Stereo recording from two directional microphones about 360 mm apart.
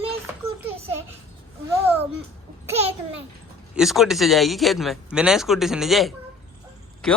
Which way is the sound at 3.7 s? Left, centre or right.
Centre.